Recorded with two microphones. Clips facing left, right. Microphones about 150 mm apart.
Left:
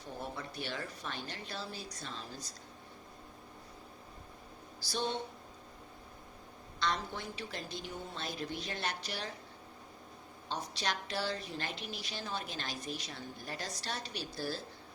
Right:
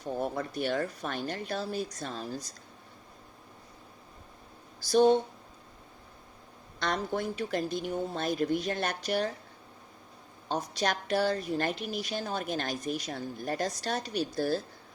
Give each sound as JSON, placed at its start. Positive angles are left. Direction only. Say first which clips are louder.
{"t": 0.2, "sound": "a woman's voice", "louder": "right 9 dB", "side_deg": -50}
{"t": 4.9, "sound": "a woman's voice", "louder": "right 15 dB", "side_deg": -50}
{"t": 6.7, "sound": "a woman's voice", "louder": "right 5 dB", "side_deg": -50}
{"t": 10.5, "sound": "a woman's voice", "louder": "right 7 dB", "side_deg": -50}